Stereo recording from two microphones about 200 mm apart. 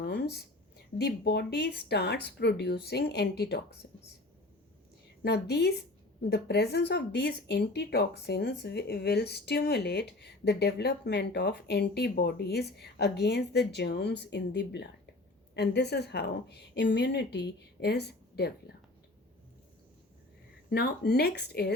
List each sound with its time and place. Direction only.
0.0 s a sound: 55° left (ahead or behind)
0.9 s speech: 55° left (ahead or behind)
5.2 s speech: 55° left (ahead or behind)
20.7 s speech: 50° left (ahead or behind)